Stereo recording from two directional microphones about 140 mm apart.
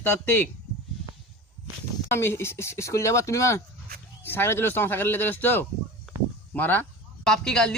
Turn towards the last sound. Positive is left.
turn(degrees=5)  # may be behind; listen again after turning